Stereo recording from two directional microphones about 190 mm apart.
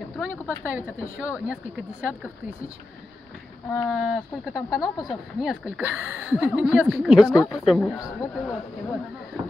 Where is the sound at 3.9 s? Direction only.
5° right (ahead or behind).